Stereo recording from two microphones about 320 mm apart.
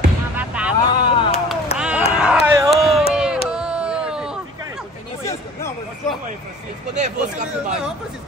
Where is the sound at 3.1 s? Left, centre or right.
Centre.